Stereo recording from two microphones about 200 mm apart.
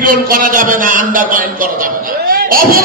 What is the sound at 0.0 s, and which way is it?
A man's voice, 45° right (ahead or behind).